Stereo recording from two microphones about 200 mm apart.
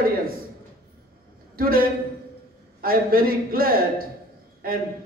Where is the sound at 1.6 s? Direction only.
45° right (ahead or behind).